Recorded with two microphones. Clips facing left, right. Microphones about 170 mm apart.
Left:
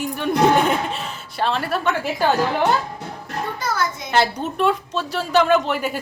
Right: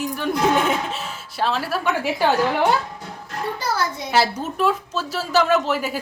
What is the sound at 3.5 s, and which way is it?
Speech, 30° right (ahead or behind).